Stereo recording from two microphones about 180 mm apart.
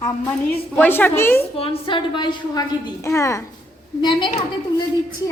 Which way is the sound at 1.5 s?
30° left (ahead or behind).